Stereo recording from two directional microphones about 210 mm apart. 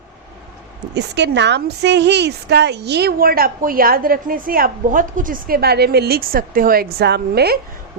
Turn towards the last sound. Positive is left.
turn(degrees=-50)  # may be behind; listen again after turning